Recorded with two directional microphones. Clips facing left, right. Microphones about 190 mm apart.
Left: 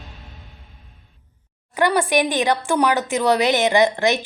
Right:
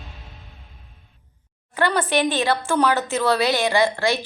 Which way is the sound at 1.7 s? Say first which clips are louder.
Left 2 dB; 10° left (ahead or behind).